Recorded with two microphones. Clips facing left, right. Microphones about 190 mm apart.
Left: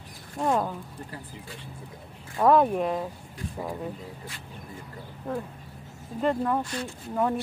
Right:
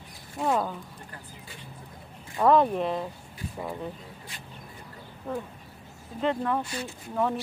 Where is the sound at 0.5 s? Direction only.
5° left (ahead or behind).